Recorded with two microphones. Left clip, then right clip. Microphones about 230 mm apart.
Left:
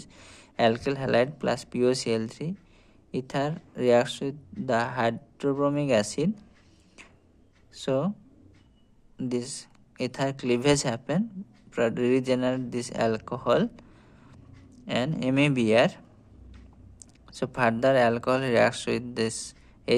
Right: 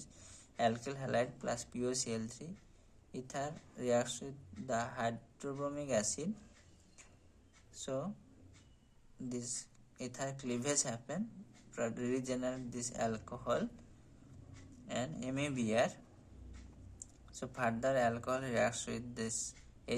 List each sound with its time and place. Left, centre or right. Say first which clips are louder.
0.0 s speech: left 9 dB; left
7.7 s speech: left 14 dB; left
9.3 s speech: left 11 dB; left
14.8 s speech: left 13 dB; left
17.0 s speech: left 14 dB; left